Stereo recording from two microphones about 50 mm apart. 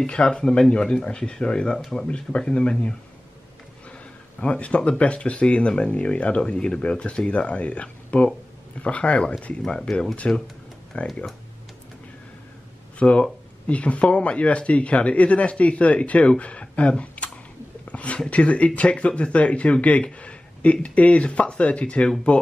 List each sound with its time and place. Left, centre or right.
0.0 s speech: centre
13.0 s speech: left
17.8 s a sound: left
18.2 s speech: left